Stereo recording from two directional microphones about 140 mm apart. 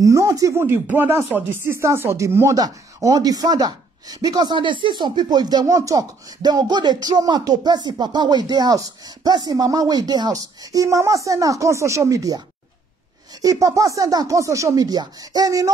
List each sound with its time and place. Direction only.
0.0 s speech: 25° right (ahead or behind)
13.4 s speech: 25° right (ahead or behind)